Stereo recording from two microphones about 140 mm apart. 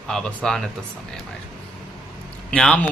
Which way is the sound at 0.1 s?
5° left (ahead or behind).